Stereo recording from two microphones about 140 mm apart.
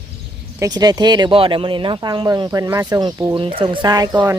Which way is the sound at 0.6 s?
30° right (ahead or behind).